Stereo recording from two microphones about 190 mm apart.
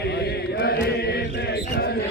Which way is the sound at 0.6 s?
60° left (ahead or behind).